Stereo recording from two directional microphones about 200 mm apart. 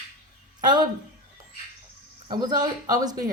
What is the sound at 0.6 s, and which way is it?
Speech, 20° right (ahead or behind).